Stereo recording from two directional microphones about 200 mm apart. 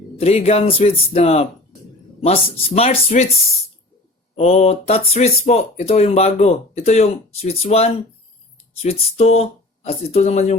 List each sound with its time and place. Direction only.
0.2 s speech: 30° left (ahead or behind)
4.4 s speech: 30° left (ahead or behind)